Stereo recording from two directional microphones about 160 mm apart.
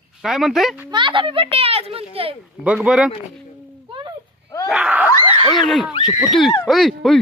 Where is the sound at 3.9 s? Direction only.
30° right (ahead or behind).